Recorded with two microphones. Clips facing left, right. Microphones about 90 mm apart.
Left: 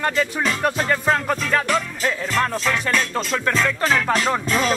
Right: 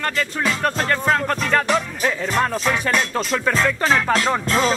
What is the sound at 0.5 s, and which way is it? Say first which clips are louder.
Speech: even; 10° left (ahead or behind).